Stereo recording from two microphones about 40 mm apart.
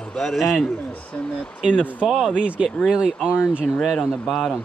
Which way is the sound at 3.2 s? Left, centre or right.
Right.